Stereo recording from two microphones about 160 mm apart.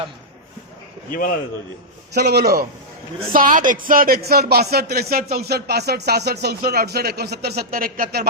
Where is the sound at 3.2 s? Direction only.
60° right (ahead or behind).